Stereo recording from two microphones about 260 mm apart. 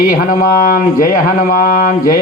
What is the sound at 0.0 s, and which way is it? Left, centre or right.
Speech, left.